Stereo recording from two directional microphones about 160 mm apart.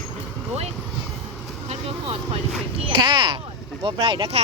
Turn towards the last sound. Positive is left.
turn(degrees=-35)  # may be behind; listen again after turning